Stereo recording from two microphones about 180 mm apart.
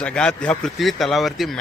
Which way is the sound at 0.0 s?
5° left (ahead or behind).